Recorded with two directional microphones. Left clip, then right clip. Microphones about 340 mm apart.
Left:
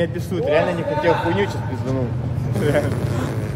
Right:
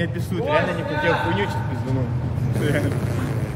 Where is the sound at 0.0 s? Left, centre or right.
Centre.